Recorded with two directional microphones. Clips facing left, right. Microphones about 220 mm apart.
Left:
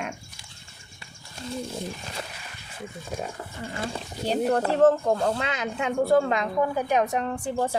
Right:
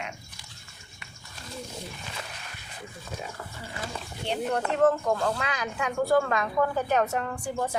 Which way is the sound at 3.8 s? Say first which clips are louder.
Left 5 dB; 35° left (ahead or behind).